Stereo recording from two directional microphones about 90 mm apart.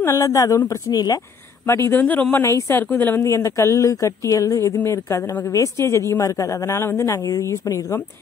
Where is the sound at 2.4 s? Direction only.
35° left (ahead or behind).